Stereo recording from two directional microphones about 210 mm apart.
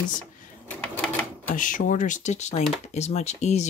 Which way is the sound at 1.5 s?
40° left (ahead or behind).